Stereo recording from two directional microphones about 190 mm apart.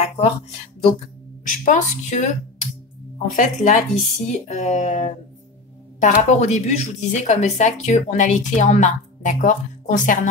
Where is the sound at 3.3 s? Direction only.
40° left (ahead or behind).